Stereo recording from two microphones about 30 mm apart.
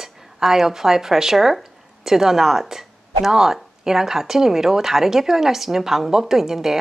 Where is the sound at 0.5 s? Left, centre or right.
Centre.